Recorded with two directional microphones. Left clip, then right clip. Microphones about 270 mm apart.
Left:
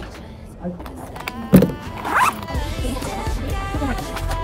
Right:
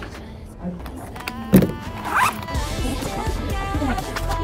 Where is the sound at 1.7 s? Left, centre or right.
Centre.